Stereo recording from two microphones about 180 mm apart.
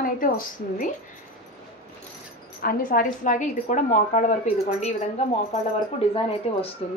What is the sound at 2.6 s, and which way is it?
A woman's voice, 50° left (ahead or behind).